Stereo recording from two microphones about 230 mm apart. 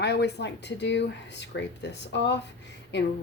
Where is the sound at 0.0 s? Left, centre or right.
Left.